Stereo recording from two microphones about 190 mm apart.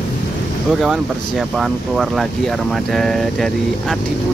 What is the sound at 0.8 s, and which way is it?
Speech, centre (ahead or behind).